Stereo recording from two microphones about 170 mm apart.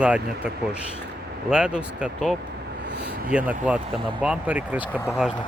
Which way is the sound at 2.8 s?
80° right.